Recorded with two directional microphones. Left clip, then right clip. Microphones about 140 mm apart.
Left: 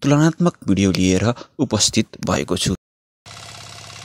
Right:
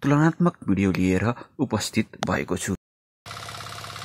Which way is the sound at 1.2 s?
30° left (ahead or behind).